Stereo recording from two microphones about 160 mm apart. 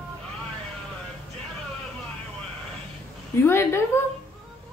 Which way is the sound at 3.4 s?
15° left (ahead or behind).